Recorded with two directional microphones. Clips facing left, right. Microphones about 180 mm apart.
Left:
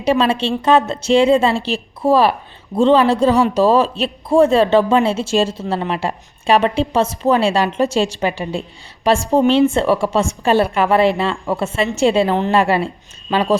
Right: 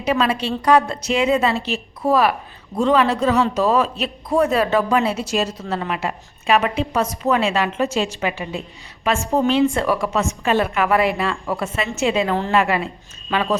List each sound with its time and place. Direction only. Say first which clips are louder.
0.0 s a woman's voice: left 4 dB; 30° left (ahead or behind)